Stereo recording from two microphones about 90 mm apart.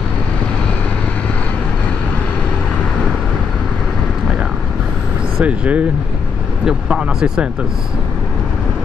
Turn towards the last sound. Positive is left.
turn(degrees=-5)  # may be behind; listen again after turning